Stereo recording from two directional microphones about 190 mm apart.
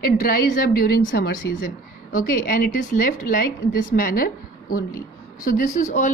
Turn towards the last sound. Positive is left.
turn(degrees=40)  # may be behind; listen again after turning